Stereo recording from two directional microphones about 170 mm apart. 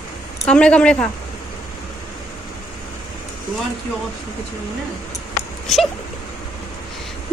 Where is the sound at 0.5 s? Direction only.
5° left (ahead or behind).